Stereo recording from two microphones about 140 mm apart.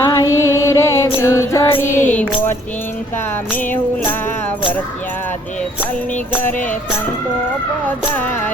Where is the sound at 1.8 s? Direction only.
65° left (ahead or behind).